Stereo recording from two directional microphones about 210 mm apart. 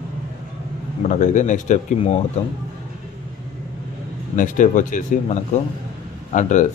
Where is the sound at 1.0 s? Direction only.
35° left (ahead or behind).